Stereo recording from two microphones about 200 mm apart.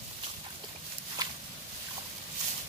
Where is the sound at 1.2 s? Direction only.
20° right (ahead or behind).